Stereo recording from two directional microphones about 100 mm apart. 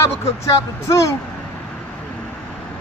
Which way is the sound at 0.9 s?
30° left (ahead or behind).